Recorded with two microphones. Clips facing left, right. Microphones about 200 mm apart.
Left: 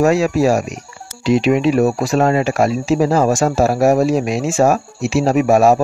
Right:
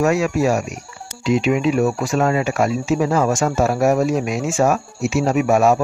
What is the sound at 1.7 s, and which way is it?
Speech, 35° left (ahead or behind).